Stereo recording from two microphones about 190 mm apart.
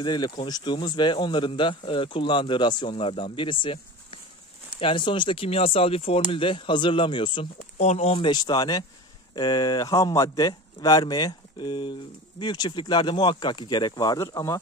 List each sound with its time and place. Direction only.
0.0 s speech: 20° left (ahead or behind)
7.7 s speech: 35° left (ahead or behind); by 14.6 s 15° left (ahead or behind)